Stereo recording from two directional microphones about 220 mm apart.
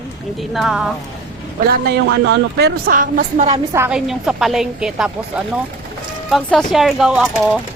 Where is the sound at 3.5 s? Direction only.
10° right (ahead or behind).